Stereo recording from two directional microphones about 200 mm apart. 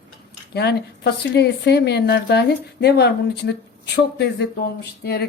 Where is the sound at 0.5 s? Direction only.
55° left (ahead or behind).